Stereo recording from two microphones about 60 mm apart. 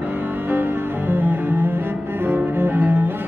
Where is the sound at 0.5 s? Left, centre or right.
Right.